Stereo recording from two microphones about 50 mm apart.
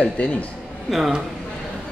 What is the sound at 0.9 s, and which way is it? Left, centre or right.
Speech, centre.